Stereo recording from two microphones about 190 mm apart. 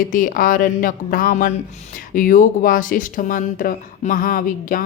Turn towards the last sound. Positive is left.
turn(degrees=45)  # may be behind; listen again after turning